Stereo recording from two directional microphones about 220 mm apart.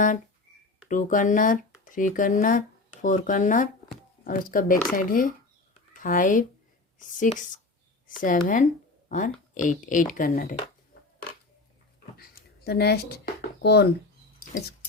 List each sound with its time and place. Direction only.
0.9 s speech: 35° left (ahead or behind)
12.1 s a sound: 45° left (ahead or behind)
13.6 s speech: 50° left (ahead or behind)